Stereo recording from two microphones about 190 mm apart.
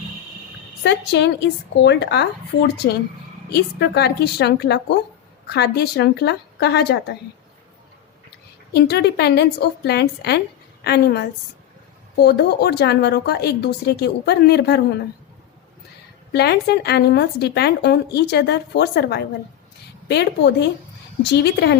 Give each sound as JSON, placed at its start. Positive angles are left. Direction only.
{"t": 0.8, "sound": "a woman's voice", "side_deg": 65}
{"t": 8.7, "sound": "a woman's voice", "side_deg": 60}
{"t": 16.3, "sound": "a woman's voice", "side_deg": 60}